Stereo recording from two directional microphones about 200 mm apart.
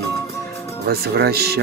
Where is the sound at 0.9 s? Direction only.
50° right (ahead or behind).